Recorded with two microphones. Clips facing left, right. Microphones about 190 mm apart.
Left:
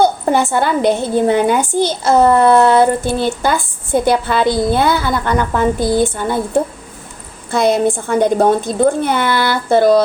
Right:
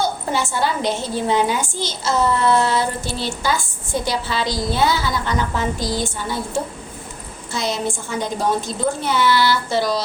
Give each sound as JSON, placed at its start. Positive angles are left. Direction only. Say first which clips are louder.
{"t": 0.3, "sound": "a woman's voice", "louder": "left 7 dB", "side_deg": 55}